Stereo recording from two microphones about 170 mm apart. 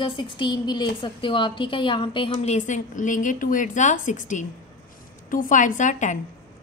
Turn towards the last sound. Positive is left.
turn(degrees=45)  # may be behind; listen again after turning